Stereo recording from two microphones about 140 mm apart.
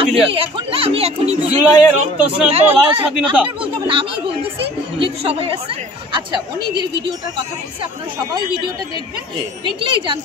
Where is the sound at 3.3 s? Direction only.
10° right (ahead or behind).